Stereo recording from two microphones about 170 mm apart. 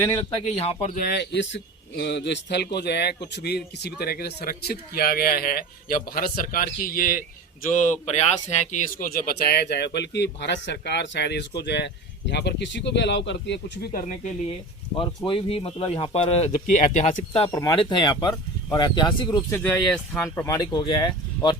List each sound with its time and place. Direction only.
0.4 s speech: 35° left (ahead or behind)
0.9 s a man's voice: 70° left (ahead or behind); by 13.9 s 90° left
14.9 s speech: 30° left (ahead or behind)
17.5 s speech: 20° left (ahead or behind)
19.5 s speech: 10° left (ahead or behind)